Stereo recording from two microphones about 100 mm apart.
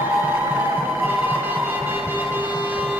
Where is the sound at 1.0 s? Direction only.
15° right (ahead or behind).